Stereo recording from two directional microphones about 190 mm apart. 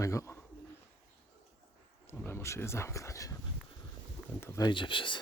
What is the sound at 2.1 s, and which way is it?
Wild animals, 10° left (ahead or behind).